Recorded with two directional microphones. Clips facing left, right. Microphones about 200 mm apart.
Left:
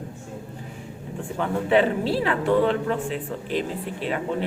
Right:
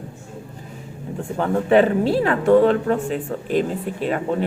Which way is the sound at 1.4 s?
45° right (ahead or behind).